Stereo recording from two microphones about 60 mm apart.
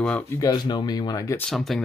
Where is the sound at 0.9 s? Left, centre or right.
Left.